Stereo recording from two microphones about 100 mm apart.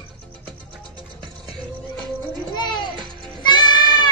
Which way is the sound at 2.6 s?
45° left (ahead or behind).